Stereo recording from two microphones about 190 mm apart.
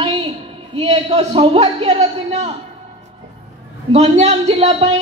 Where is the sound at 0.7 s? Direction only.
35° right (ahead or behind).